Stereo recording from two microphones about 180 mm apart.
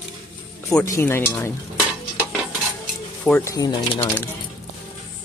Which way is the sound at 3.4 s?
20° left (ahead or behind).